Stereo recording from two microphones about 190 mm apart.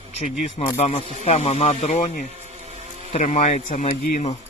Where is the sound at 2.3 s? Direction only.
35° right (ahead or behind).